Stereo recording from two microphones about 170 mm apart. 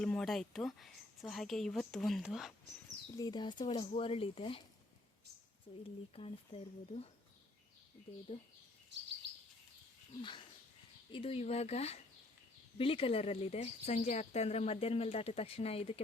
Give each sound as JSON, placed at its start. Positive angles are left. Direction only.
{"t": 0.0, "sound": "speech", "side_deg": 5}
{"t": 3.1, "sound": "speech", "side_deg": 20}
{"t": 6.1, "sound": "speech", "side_deg": 35}
{"t": 10.2, "sound": "speech", "side_deg": 30}